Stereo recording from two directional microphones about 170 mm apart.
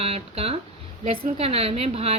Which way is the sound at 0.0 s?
35° right (ahead or behind).